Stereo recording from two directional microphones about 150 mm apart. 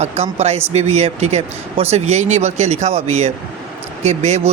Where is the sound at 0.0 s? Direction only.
45° right (ahead or behind).